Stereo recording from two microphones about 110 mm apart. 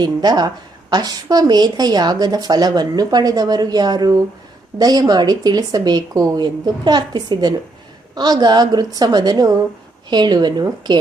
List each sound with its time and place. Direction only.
0.0 s a woman's voice: 40° right (ahead or behind)